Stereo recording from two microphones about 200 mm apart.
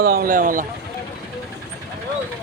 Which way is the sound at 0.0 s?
50° right (ahead or behind).